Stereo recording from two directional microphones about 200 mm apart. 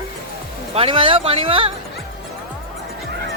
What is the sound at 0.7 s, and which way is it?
Speech, 25° right (ahead or behind).